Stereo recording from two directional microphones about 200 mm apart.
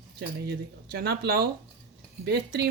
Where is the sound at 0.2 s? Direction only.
50° right (ahead or behind).